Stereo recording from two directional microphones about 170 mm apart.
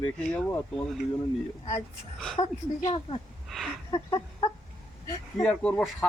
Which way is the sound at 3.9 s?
25° left (ahead or behind).